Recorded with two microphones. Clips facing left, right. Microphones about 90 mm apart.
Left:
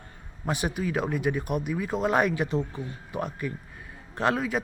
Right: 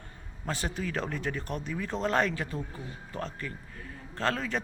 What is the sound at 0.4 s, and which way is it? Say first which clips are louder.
Speech: left 5 dB; 15° left (ahead or behind).